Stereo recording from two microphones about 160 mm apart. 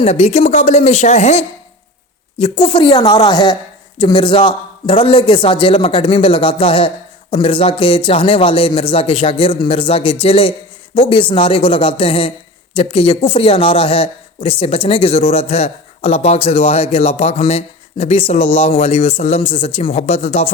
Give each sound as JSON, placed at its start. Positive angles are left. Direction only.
{"t": 0.0, "sound": "a woman's voice", "side_deg": 40}
{"t": 2.4, "sound": "a woman's voice", "side_deg": 30}